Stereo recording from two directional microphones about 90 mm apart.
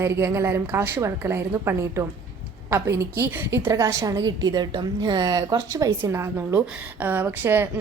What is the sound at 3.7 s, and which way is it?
A woman's voice, 35° right (ahead or behind).